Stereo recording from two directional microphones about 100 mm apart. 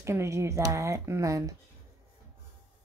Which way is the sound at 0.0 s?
30° right (ahead or behind).